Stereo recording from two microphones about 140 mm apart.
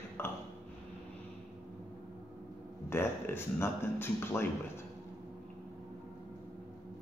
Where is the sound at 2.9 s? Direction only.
15° left (ahead or behind).